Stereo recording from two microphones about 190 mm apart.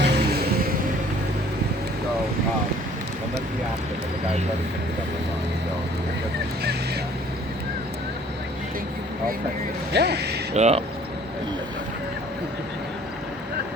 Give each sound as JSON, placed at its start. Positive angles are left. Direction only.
{"t": 0.0, "sound": "music", "side_deg": -60}
{"t": 6.6, "sound": "speech", "side_deg": -55}
{"t": 9.9, "sound": "speech", "side_deg": -60}
{"t": 10.5, "sound": "speech", "side_deg": -35}